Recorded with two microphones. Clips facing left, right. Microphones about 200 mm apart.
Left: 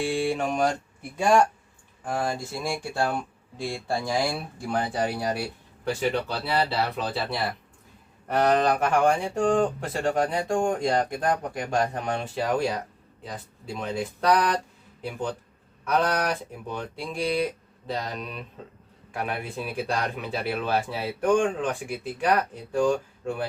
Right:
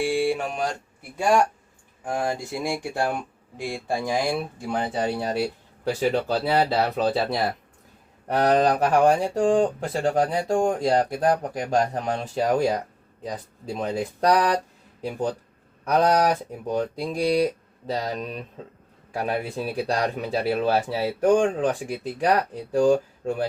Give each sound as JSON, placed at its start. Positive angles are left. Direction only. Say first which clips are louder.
{"t": 0.0, "sound": "mantra", "louder": "right 2 dB", "side_deg": -10}
{"t": 1.1, "sound": "speech", "louder": "even", "side_deg": -5}
{"t": 2.0, "sound": "speech", "louder": "right 2 dB", "side_deg": -15}